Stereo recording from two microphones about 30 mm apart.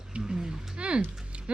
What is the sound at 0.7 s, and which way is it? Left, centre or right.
Music, right.